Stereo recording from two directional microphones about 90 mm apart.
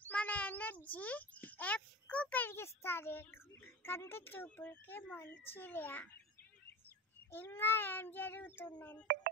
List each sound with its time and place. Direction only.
0.1 s cat: 15° left (ahead or behind)
0.8 s a child's voice: 15° left (ahead or behind)
7.2 s a child's voice: 25° left (ahead or behind)